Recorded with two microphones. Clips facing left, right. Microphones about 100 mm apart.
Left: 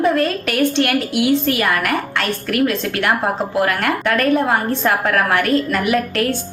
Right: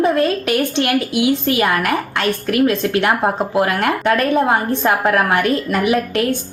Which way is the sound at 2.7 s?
20° right (ahead or behind).